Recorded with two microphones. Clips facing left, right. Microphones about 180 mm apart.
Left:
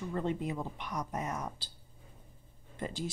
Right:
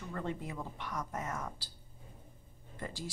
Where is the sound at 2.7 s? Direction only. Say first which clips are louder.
Left 5 dB; 20° left (ahead or behind).